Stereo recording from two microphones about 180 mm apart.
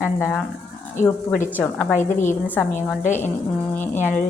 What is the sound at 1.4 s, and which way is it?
Speech, 10° left (ahead or behind).